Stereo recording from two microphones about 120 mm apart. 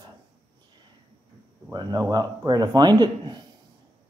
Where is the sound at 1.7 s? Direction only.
35° right (ahead or behind).